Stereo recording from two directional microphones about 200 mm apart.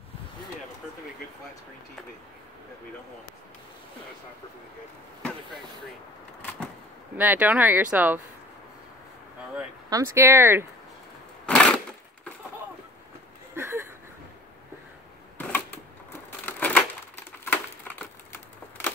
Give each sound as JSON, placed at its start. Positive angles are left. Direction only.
{"t": 7.2, "sound": "speech", "side_deg": -10}
{"t": 9.8, "sound": "speech", "side_deg": -15}
{"t": 11.4, "sound": "sewing machine", "side_deg": 5}
{"t": 13.6, "sound": "a sound", "side_deg": -15}
{"t": 15.3, "sound": "camera", "side_deg": 10}
{"t": 16.4, "sound": "crushing", "side_deg": 10}
{"t": 17.5, "sound": "a sound", "side_deg": 10}